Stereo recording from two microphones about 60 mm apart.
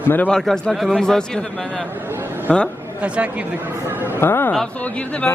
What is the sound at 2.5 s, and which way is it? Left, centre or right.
Speech, centre.